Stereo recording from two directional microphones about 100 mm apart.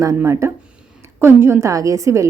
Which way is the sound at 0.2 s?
30° right (ahead or behind).